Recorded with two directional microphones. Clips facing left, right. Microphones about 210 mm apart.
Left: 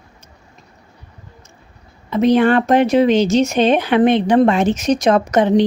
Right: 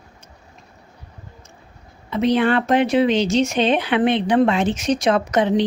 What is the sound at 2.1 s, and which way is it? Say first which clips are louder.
Speech: left 5 dB; 45° left (ahead or behind).